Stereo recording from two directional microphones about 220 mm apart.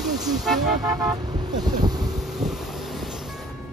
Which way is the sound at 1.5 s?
20° right (ahead or behind).